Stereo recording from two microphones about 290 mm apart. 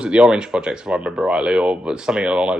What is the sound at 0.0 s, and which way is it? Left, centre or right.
A man's voice, centre.